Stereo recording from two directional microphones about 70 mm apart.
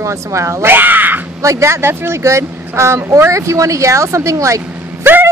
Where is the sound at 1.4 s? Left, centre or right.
Right.